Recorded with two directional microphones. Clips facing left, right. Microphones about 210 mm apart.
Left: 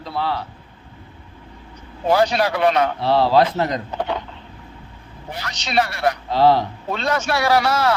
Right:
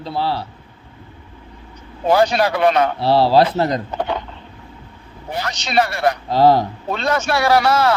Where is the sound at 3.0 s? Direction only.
35° right (ahead or behind).